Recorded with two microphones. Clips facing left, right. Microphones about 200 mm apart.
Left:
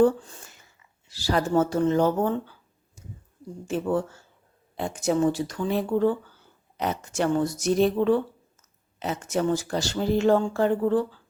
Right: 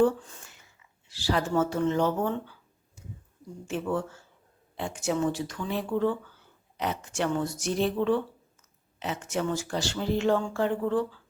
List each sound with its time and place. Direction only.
0.0 s speech: 35° left (ahead or behind)